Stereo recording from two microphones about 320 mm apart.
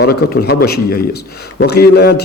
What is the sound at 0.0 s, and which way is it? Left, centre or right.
A man's voice, left.